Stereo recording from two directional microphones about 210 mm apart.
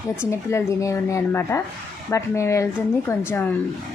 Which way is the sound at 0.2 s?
10° left (ahead or behind).